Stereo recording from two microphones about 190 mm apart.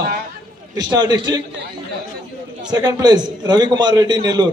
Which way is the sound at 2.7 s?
20° right (ahead or behind).